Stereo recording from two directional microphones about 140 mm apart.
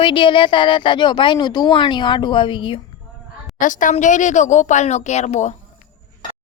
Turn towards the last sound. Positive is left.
turn(degrees=55)  # may be behind; listen again after turning